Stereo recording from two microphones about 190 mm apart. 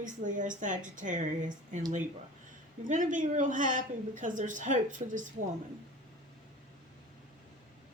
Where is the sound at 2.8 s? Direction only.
40° right (ahead or behind).